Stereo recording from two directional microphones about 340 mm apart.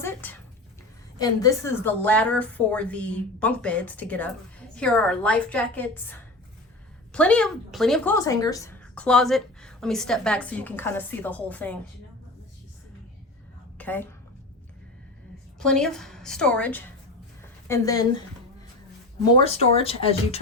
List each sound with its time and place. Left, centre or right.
0.0 s a sound: centre
1.2 s speech: centre
13.7 s a woman's voice: centre
15.5 s speech: centre
19.4 s speech: centre